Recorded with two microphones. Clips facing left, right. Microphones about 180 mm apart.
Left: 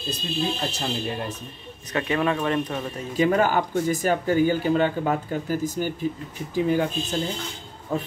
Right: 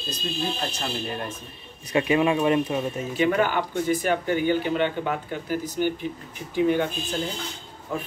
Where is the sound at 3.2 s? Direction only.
40° left (ahead or behind).